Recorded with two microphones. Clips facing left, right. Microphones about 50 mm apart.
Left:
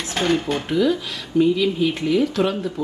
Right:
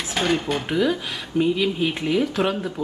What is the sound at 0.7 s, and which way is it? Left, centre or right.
Speech, centre.